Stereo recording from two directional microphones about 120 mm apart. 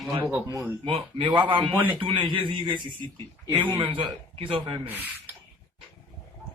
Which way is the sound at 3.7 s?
45° right (ahead or behind).